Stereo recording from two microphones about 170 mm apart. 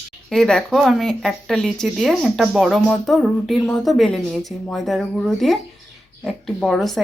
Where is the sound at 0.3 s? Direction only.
5° left (ahead or behind).